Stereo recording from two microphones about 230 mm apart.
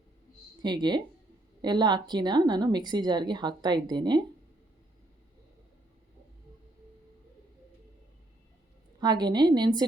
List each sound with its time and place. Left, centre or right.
0.6 s a woman's voice: centre
9.0 s a woman's voice: centre